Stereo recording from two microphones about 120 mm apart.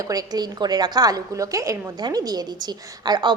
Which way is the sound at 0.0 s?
30° right (ahead or behind).